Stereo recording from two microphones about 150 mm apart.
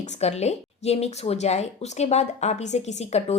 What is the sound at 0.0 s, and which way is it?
A woman's voice, 50° left (ahead or behind).